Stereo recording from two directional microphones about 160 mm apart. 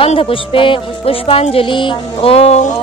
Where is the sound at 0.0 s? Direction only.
35° left (ahead or behind).